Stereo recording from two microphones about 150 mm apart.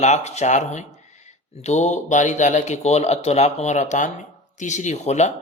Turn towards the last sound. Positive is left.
turn(degrees=50)  # may be behind; listen again after turning